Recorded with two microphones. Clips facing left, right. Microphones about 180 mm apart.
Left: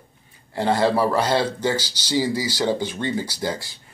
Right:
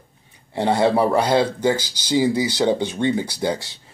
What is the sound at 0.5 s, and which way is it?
Speech, 20° right (ahead or behind).